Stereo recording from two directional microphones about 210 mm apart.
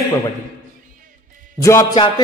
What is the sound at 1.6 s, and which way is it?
Speech, 15° left (ahead or behind).